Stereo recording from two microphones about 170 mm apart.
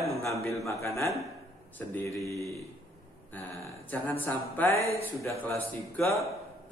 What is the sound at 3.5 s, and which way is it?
Speech, 20° right (ahead or behind).